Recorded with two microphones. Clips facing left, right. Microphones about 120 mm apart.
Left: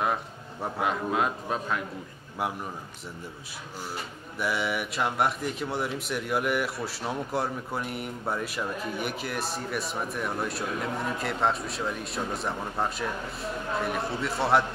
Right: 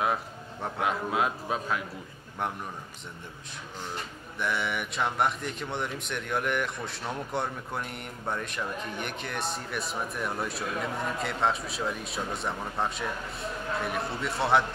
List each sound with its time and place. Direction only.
0.0 s speech: centre (ahead or behind)
3.9 s speech: 5° left (ahead or behind)